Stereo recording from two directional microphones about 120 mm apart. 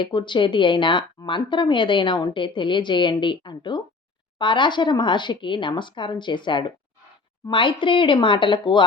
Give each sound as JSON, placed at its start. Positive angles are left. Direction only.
{"t": 0.0, "sound": "speech", "side_deg": 40}